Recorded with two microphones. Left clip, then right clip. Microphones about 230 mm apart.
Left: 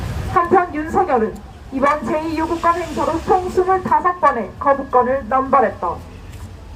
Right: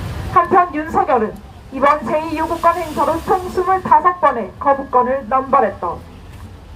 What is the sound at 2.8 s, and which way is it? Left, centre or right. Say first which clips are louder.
Speech: right 3 dB; right.